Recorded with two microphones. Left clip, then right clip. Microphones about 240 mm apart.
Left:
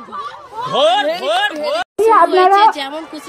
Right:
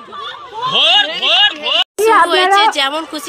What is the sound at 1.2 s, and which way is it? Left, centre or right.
A woman's voice, centre.